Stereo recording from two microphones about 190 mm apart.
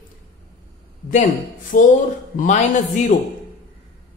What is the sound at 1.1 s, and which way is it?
Speech, 45° left (ahead or behind).